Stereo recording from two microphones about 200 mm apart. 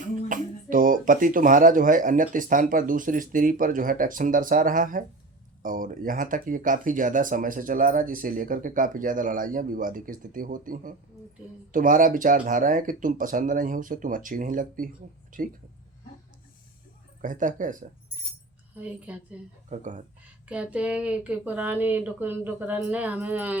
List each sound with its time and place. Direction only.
0.3 s speech: 40° right (ahead or behind)
17.2 s speech: 40° right (ahead or behind)
18.8 s speech: 5° right (ahead or behind)
19.7 s speech: 40° right (ahead or behind)
20.5 s speech: 5° right (ahead or behind)